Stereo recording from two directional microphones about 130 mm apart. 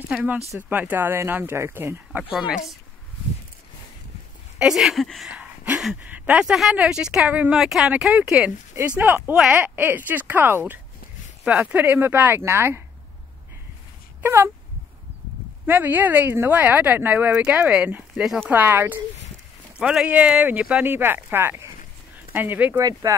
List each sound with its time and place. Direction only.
0.1 s speech: 10° right (ahead or behind)
2.3 s speech: 5° right (ahead or behind)
4.6 s speech: 5° right (ahead or behind)
14.2 s speech: 15° right (ahead or behind)
15.6 s speech: 15° right (ahead or behind)
18.5 s speech: 15° right (ahead or behind)
22.8 s speech: 30° right (ahead or behind)